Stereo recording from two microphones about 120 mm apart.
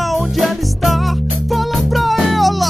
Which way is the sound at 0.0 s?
Centre (ahead or behind).